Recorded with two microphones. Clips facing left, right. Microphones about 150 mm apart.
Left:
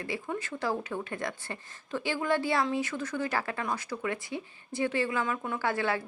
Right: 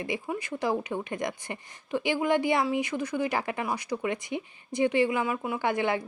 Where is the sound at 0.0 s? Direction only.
15° right (ahead or behind).